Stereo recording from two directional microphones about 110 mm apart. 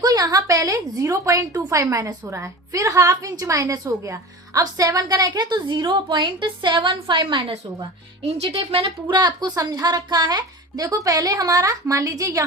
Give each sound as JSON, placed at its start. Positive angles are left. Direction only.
{"t": 0.0, "sound": "a woman's voice", "side_deg": -35}
{"t": 8.2, "sound": "a woman's voice", "side_deg": -60}